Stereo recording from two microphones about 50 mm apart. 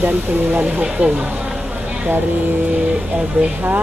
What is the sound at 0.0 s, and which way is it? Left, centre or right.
Speech, right.